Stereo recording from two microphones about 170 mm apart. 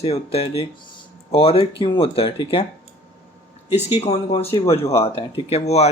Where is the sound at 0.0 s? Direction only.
35° left (ahead or behind).